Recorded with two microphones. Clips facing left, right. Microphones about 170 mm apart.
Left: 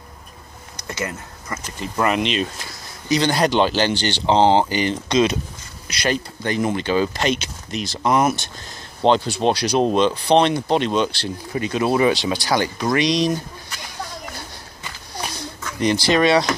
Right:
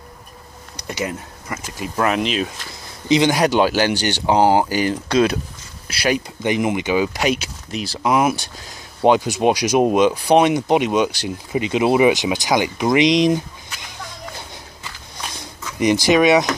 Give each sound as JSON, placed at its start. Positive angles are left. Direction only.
{"t": 0.7, "sound": "speech", "side_deg": -15}
{"t": 2.0, "sound": "speech", "side_deg": 0}
{"t": 3.1, "sound": "speech", "side_deg": -15}
{"t": 15.6, "sound": "speech", "side_deg": -15}